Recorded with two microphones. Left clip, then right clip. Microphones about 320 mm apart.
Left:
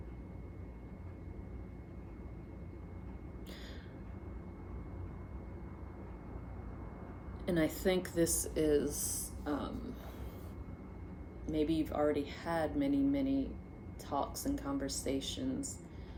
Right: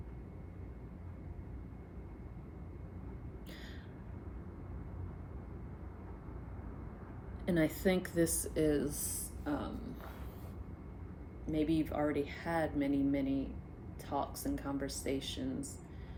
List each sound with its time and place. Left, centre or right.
7.4 s a woman's voice: centre
11.4 s a woman's voice: centre